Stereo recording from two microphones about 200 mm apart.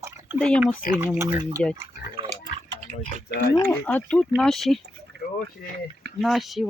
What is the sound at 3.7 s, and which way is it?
Speech, 5° left (ahead or behind).